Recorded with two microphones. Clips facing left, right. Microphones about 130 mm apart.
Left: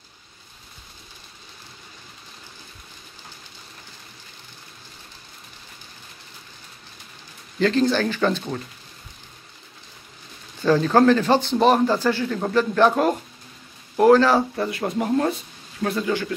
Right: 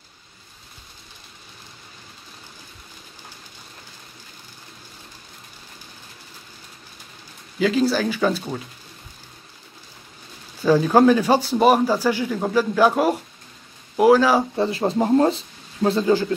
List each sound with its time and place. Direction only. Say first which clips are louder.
7.5 s speech: even; 5° right (ahead or behind)
10.6 s speech: right 2 dB; 10° right (ahead or behind)
14.6 s speech: right 4 dB; 30° right (ahead or behind)